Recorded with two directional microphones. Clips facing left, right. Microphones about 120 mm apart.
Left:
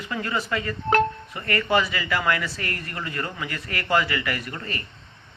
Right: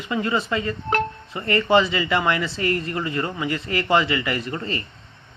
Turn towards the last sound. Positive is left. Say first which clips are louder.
# right 5 dB
turn(degrees=-25)  # may be behind; listen again after turning